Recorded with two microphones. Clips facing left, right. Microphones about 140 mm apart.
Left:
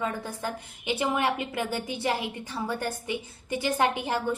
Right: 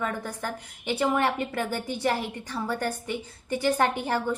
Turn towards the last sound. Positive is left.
turn(degrees=15)  # may be behind; listen again after turning